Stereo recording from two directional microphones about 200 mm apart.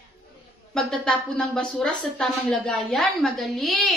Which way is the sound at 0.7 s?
5° left (ahead or behind).